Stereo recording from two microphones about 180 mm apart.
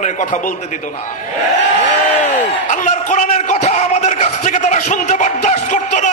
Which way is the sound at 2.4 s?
45° left (ahead or behind).